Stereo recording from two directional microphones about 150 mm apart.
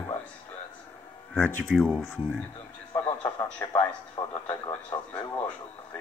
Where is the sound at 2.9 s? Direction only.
30° left (ahead or behind).